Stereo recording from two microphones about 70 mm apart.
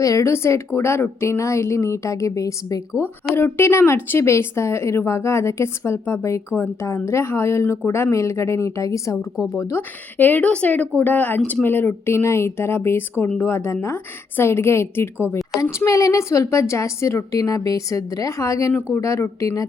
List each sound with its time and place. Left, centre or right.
0.0 s speech: left
0.3 s a woman's voice: left
3.3 s a woman's voice: left
9.3 s speech: centre
9.6 s speech: left
10.2 s a woman's voice: left